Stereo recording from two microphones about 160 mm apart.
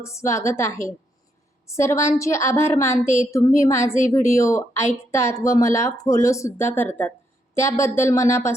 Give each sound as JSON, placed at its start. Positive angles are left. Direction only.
{"t": 0.0, "sound": "a woman's voice", "side_deg": 20}
{"t": 1.7, "sound": "a woman's voice", "side_deg": 20}